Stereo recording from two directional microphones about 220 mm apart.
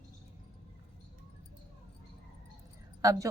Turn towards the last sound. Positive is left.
turn(degrees=-15)  # may be behind; listen again after turning